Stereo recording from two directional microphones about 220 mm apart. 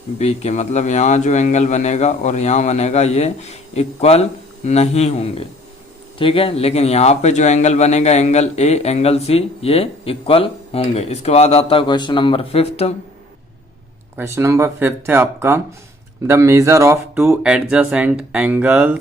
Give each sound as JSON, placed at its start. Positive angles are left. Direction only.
{"t": 0.2, "sound": "a man's voice", "side_deg": 30}
{"t": 14.2, "sound": "speech", "side_deg": -10}